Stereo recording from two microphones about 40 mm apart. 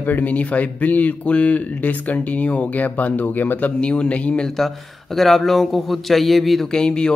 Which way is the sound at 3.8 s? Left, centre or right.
Left.